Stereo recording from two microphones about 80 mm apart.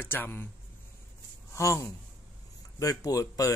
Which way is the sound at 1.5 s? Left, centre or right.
Left.